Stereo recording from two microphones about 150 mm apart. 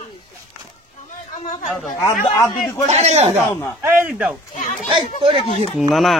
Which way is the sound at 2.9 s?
45° right (ahead or behind).